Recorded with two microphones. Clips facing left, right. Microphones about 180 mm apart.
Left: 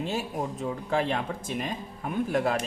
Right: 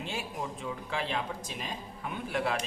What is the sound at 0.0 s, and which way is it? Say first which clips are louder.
Speech: left 6 dB; 40° left (ahead or behind).